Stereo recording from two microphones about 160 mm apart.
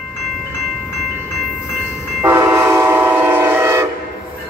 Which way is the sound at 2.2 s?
15° right (ahead or behind).